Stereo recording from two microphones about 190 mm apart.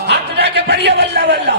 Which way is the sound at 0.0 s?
60° right (ahead or behind).